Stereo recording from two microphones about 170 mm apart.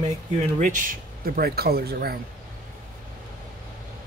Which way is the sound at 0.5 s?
50° right (ahead or behind).